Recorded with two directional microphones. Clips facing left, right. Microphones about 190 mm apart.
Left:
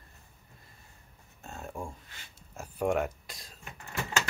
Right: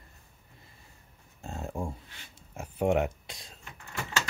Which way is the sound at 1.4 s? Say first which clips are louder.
Right 4 dB; 25° right (ahead or behind).